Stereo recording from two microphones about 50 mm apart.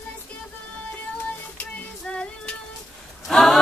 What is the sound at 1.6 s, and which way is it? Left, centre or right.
Child singing, left.